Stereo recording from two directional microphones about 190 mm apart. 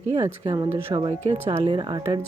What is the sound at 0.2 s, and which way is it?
Speech, 20° right (ahead or behind).